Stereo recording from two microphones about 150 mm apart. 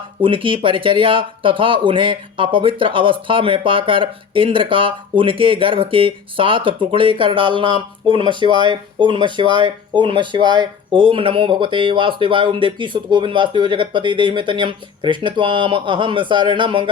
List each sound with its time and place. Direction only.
0.2 s speech: 35° right (ahead or behind)